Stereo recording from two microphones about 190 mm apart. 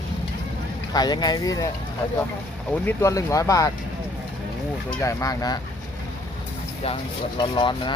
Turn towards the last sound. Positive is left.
turn(degrees=25)  # may be behind; listen again after turning